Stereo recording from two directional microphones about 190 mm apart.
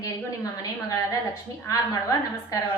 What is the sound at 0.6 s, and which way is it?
A woman's voice, 15° left (ahead or behind).